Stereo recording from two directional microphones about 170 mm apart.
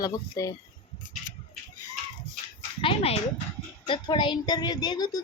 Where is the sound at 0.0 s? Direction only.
20° left (ahead or behind).